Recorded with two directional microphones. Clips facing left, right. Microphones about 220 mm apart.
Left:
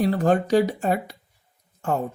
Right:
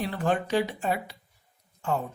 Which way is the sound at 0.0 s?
40° left (ahead or behind).